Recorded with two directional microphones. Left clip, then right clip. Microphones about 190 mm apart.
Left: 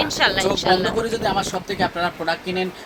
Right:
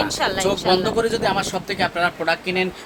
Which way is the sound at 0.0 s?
5° right (ahead or behind).